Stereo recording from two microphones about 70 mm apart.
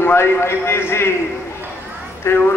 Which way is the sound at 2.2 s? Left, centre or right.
Left.